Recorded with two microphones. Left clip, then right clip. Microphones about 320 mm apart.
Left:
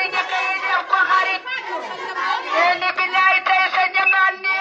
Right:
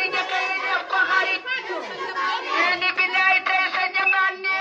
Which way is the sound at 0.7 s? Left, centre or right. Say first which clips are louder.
Left 4 dB; centre.